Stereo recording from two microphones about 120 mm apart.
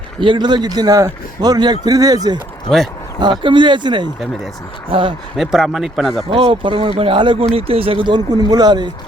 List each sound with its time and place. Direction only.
0.2 s speech: 40° right (ahead or behind)
2.6 s speech: centre (ahead or behind)
3.4 s speech: 40° right (ahead or behind)
5.4 s speech: centre (ahead or behind)
6.3 s speech: 45° right (ahead or behind)